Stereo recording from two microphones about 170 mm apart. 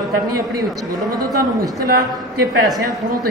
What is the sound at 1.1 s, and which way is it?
Speech, 20° right (ahead or behind).